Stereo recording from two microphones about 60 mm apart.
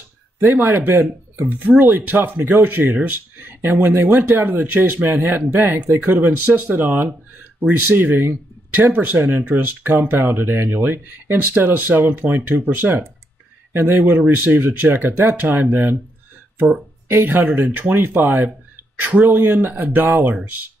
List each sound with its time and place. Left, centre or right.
0.4 s speech: right
17.1 s speech: right
17.4 s speech: right